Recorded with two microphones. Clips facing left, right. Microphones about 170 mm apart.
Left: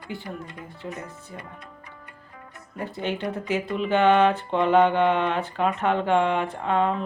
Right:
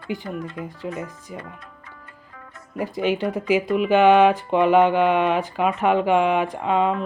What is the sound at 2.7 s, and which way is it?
Speech, 10° right (ahead or behind).